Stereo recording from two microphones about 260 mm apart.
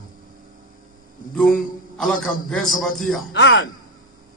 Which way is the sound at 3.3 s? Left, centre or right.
Left.